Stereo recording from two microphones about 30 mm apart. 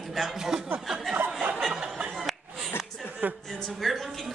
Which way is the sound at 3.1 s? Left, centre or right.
Right.